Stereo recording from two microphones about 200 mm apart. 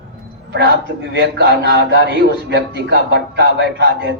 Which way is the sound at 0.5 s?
60° right (ahead or behind).